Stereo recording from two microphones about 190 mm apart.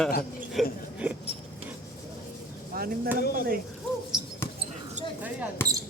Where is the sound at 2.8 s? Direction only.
50° right (ahead or behind).